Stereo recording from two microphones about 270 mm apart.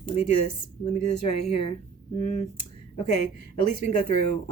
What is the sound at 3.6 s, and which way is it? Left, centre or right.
Speech, left.